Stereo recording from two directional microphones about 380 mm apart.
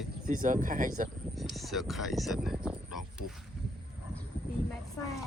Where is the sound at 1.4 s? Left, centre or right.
Centre.